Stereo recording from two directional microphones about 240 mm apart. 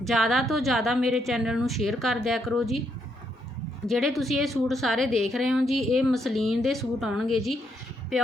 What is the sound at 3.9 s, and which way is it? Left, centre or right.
A woman's voice, centre.